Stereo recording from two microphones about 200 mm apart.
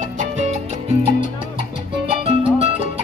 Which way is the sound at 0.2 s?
35° right (ahead or behind).